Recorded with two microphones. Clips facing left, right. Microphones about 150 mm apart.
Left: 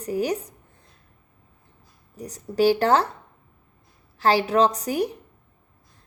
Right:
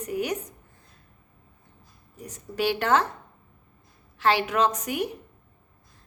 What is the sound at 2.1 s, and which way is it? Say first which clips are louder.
Speech: left 7 dB; 35° left (ahead or behind).